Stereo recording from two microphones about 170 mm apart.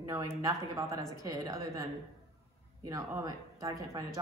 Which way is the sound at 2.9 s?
20° right (ahead or behind).